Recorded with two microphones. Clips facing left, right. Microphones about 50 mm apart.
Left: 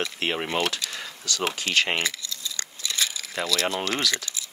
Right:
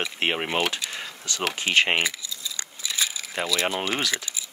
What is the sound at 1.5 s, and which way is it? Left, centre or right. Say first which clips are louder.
Speech: right 5 dB; right.